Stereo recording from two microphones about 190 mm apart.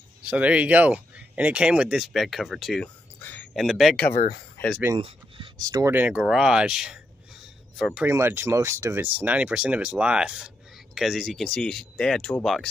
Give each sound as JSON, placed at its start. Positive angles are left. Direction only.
{"t": 0.2, "sound": "speech", "side_deg": -5}
{"t": 4.9, "sound": "speech", "side_deg": -25}
{"t": 8.1, "sound": "speech", "side_deg": -10}